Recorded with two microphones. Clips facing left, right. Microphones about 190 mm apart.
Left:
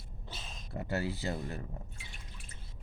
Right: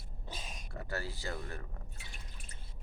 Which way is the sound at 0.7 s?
20° left (ahead or behind).